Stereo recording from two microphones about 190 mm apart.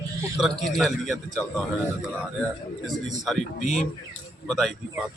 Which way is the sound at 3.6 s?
40° left (ahead or behind).